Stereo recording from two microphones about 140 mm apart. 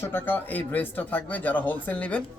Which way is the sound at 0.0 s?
15° left (ahead or behind).